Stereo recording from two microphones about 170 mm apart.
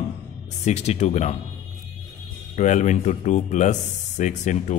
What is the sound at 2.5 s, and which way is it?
Speech, 45° left (ahead or behind).